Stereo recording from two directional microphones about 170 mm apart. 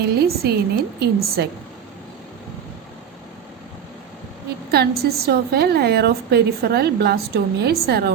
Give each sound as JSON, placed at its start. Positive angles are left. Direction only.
{"t": 0.0, "sound": "a woman's voice", "side_deg": -70}
{"t": 4.7, "sound": "a woman's voice", "side_deg": -70}